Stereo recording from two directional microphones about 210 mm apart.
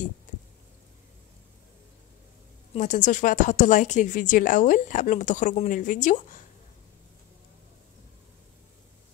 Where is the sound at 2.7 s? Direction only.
35° left (ahead or behind).